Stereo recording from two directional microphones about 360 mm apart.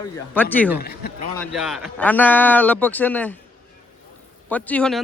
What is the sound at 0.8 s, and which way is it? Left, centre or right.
Speech, left.